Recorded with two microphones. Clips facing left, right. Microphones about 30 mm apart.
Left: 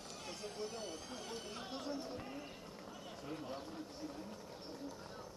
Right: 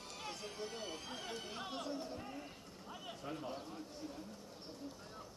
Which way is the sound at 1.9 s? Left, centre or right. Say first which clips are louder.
Even; centre.